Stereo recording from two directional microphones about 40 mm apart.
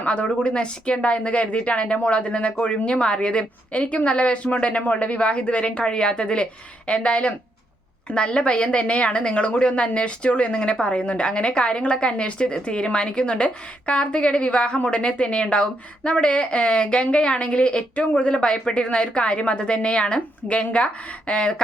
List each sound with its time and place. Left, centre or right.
0.0 s a woman's voice: left